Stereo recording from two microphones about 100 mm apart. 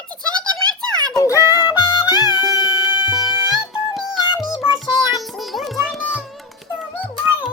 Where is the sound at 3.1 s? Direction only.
5° right (ahead or behind).